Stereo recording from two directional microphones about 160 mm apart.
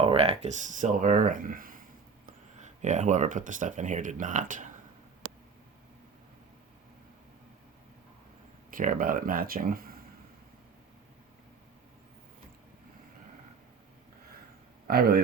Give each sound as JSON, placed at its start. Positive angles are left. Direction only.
{"t": 0.0, "sound": "speech", "side_deg": -40}
{"t": 2.2, "sound": "speech", "side_deg": -50}
{"t": 8.7, "sound": "speech", "side_deg": -60}
{"t": 14.8, "sound": "speech", "side_deg": -70}